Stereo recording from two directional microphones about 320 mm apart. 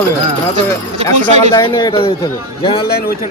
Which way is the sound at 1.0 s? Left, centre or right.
Centre.